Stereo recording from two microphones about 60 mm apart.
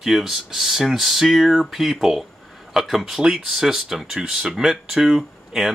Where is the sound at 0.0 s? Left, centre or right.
Centre.